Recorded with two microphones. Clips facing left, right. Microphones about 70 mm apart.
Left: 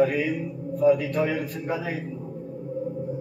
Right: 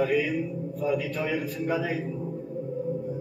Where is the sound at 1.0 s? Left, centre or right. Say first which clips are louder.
Left 3 dB; left.